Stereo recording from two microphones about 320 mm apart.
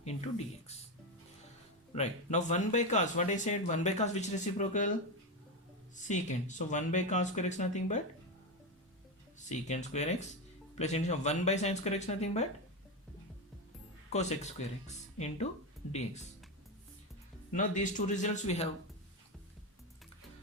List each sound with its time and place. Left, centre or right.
0.0 s speech: centre
1.9 s speech: left
6.0 s speech: left
9.5 s speech: left
14.1 s speech: left
17.5 s speech: left